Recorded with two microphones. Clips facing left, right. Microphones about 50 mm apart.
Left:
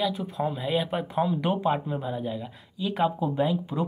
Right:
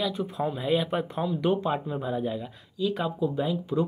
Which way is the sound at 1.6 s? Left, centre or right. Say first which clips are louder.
Left 2 dB; centre.